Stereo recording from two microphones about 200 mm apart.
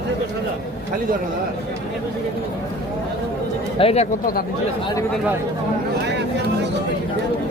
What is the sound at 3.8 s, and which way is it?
Speech, 30° left (ahead or behind).